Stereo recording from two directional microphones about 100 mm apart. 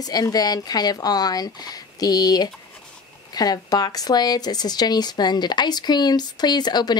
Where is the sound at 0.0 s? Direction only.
40° left (ahead or behind).